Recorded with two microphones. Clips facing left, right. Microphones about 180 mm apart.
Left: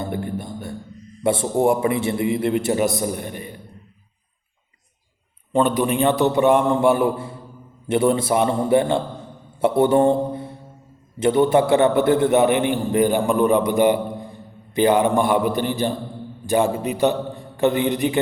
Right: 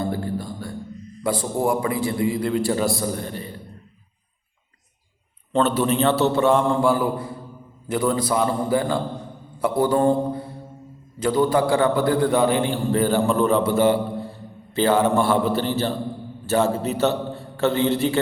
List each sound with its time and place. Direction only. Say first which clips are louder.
0.0 s music: right 1 dB; 20° left (ahead or behind)
1.2 s a man's voice: left 4 dB; 25° left (ahead or behind)
5.5 s a man's voice: left 1 dB; 10° left (ahead or behind)